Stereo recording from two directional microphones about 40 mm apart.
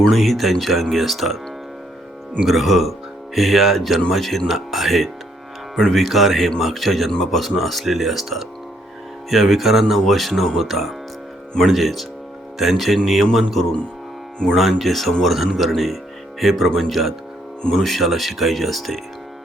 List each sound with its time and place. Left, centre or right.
0.1 s speech: centre
2.5 s speech: centre
5.7 s speech: centre
13.5 s speech: centre
14.5 s speech: centre